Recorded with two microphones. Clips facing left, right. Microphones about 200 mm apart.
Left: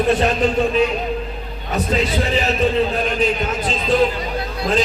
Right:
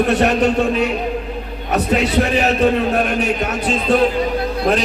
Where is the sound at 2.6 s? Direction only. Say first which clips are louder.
Right 2 dB; 70° right (ahead or behind).